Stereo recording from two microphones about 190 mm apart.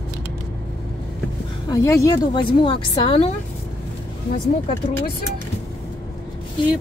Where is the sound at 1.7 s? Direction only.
15° left (ahead or behind).